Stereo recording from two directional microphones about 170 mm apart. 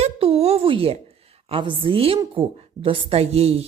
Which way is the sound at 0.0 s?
35° right (ahead or behind).